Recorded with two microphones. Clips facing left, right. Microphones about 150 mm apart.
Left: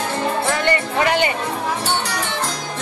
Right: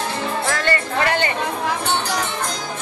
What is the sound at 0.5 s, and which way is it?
Music, 15° left (ahead or behind).